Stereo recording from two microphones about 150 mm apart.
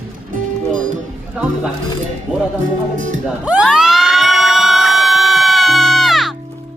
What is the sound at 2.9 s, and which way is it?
Speech, 60° right (ahead or behind).